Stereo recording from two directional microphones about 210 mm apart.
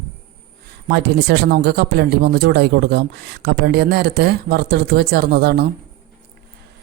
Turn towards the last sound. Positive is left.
turn(degrees=-50)  # may be behind; listen again after turning